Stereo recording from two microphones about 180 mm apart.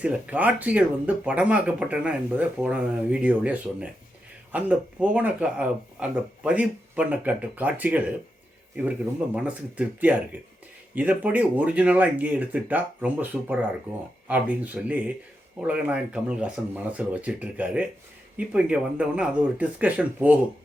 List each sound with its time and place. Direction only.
0.0 s speech: 5° right (ahead or behind)
9.3 s speech: 5° right (ahead or behind)